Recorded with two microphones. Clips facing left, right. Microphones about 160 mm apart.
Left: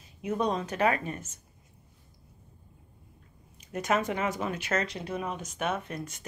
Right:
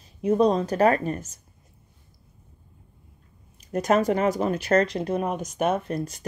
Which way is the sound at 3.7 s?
35° right (ahead or behind).